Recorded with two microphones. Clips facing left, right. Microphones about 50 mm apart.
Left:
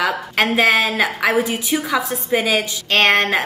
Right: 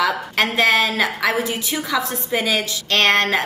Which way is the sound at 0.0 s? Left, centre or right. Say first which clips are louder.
Left 1 dB; centre.